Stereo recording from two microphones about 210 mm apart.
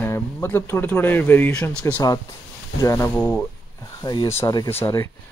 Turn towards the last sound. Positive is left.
turn(degrees=10)  # may be behind; listen again after turning